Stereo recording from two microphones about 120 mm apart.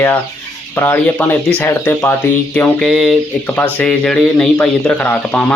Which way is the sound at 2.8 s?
Centre (ahead or behind).